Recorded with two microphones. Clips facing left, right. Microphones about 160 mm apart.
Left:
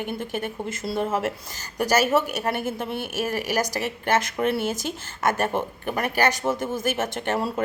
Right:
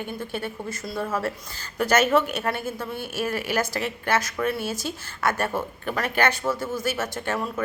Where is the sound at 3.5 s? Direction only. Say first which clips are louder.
Even; 15° left (ahead or behind).